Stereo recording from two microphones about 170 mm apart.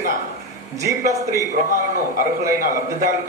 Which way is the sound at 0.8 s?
20° right (ahead or behind).